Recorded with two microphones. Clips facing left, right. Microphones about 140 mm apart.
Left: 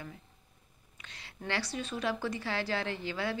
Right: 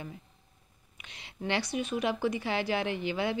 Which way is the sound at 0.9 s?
15° right (ahead or behind).